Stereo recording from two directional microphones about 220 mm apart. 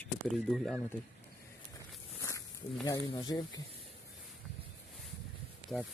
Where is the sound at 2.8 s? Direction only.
15° left (ahead or behind).